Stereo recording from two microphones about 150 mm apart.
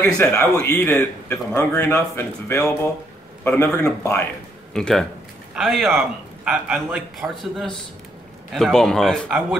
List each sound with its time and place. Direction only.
0.0 s speech: 15° left (ahead or behind)
4.7 s a man's voice: 5° left (ahead or behind)